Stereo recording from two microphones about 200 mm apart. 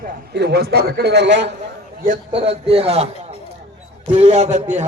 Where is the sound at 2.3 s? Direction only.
30° right (ahead or behind).